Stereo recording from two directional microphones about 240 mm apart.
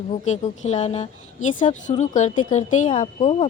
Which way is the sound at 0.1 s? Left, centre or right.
Left.